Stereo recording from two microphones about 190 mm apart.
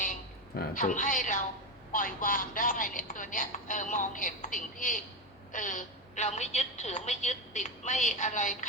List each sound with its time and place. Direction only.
0.0 s a woman's voice: 45° left (ahead or behind)